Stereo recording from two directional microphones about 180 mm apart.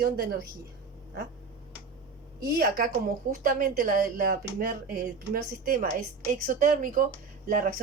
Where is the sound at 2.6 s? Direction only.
55° right (ahead or behind).